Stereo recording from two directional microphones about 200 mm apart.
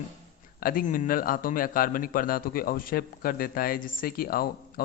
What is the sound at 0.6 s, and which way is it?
A man's voice, 45° left (ahead or behind).